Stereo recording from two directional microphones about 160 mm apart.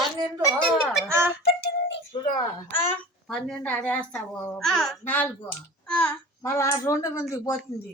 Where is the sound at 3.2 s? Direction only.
5° left (ahead or behind).